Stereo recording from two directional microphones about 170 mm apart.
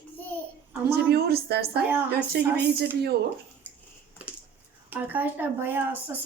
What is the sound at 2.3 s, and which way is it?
Speech, 75° right (ahead or behind).